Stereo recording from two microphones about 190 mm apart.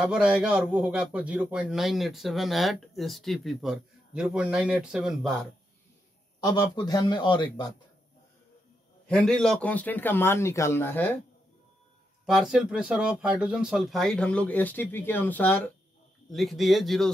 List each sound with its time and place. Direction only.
0.0 s a man's voice: 5° right (ahead or behind)
6.4 s speech: 20° left (ahead or behind)
9.0 s a man's voice: 5° left (ahead or behind)
12.3 s a man's voice: centre (ahead or behind)